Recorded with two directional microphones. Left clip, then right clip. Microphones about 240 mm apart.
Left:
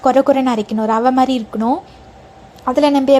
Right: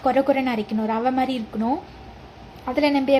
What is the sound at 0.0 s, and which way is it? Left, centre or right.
A woman's voice, left.